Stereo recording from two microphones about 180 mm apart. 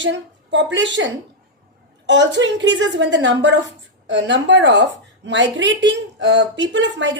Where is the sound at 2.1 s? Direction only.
90° right.